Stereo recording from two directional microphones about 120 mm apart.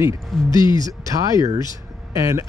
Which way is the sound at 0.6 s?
40° left (ahead or behind).